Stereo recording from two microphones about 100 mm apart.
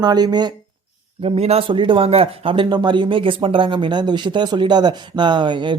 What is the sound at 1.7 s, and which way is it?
Speech, 55° right (ahead or behind).